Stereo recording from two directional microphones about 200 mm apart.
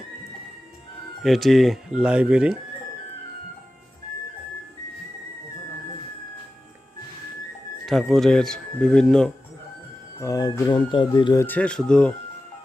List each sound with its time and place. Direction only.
1.2 s speech: centre (ahead or behind)
7.9 s speech: centre (ahead or behind)
10.2 s speech: 15° left (ahead or behind)
11.4 s speech: 5° left (ahead or behind)